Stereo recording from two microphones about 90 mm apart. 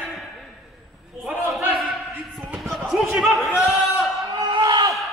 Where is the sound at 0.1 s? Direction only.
Centre (ahead or behind).